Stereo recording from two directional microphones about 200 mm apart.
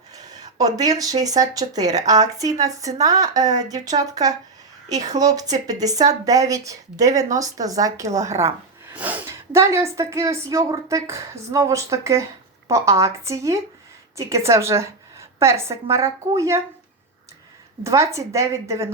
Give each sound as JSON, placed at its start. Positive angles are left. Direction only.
{"t": 0.6, "sound": "speech", "side_deg": -20}
{"t": 17.8, "sound": "speech", "side_deg": -15}